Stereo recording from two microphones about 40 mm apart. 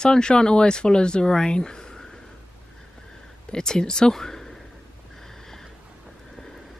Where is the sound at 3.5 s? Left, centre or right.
Centre.